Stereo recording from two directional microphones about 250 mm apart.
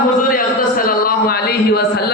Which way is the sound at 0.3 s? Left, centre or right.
Left.